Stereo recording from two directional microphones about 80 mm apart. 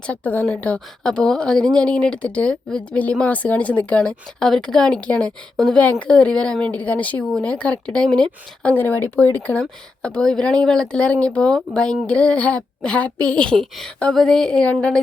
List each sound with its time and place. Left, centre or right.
0.1 s a woman's voice: centre
8.7 s speech: left